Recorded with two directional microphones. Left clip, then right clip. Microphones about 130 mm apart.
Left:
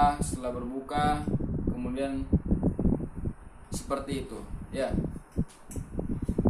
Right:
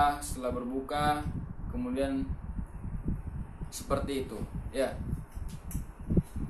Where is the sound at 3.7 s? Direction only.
10° right (ahead or behind).